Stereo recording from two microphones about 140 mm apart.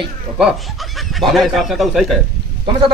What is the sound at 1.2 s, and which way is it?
Speech, centre (ahead or behind).